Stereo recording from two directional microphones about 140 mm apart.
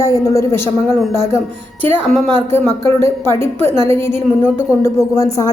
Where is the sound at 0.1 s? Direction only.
25° left (ahead or behind).